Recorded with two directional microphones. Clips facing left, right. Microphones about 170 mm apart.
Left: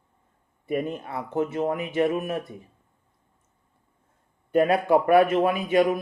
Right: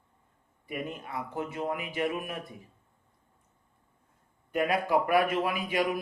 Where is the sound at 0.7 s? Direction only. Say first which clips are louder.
Left 8 dB; 30° left (ahead or behind).